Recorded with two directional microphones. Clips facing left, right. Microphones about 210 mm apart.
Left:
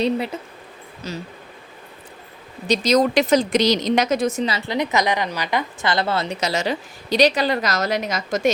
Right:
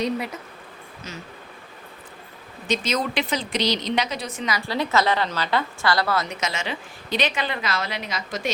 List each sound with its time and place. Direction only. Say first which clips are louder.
1.0 s a woman's voice: left 7 dB; 35° left (ahead or behind)
2.6 s speech: left 7 dB; 40° left (ahead or behind)
4.4 s a woman's voice: left 3 dB; 25° left (ahead or behind); by 8.5 s 45° left (ahead or behind)